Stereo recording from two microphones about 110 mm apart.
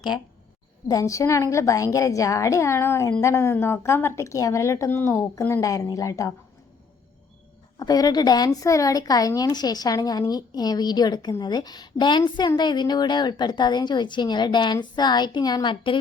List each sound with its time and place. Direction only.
0.9 s a woman's voice: 30° left (ahead or behind)
7.8 s a woman's voice: 35° left (ahead or behind)